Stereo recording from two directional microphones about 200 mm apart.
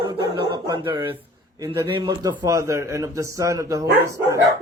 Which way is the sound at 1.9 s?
20° right (ahead or behind).